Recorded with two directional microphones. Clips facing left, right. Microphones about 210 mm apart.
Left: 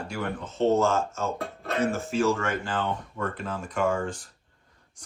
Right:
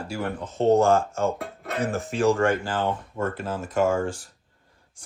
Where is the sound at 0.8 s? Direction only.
55° right (ahead or behind).